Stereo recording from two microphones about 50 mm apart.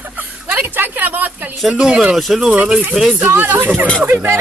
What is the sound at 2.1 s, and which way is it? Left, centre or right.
Speech, centre.